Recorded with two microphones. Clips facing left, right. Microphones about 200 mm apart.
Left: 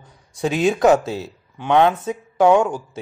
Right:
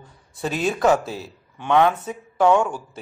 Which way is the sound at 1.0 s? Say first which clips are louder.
Left 5 dB; 75° left (ahead or behind).